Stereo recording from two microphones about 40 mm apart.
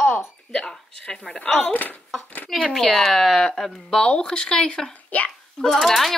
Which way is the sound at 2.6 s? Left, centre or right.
Centre.